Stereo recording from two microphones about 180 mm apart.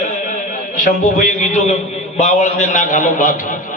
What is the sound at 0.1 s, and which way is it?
A man's voice, 45° left (ahead or behind).